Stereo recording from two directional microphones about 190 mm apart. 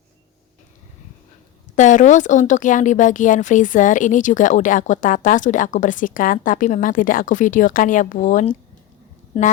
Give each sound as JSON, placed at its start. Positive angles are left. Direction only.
{"t": 1.7, "sound": "a woman's voice", "side_deg": 40}
{"t": 9.3, "sound": "a woman's voice", "side_deg": 25}